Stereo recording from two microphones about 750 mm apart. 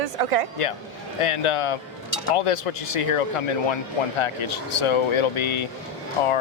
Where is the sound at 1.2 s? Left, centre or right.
Left.